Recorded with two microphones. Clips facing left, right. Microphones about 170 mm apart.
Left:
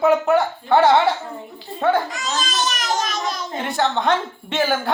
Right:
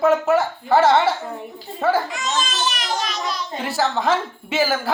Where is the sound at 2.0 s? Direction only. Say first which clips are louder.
Right 1 dB; 40° left (ahead or behind).